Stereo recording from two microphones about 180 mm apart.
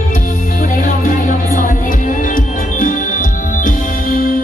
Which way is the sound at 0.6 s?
45° left (ahead or behind).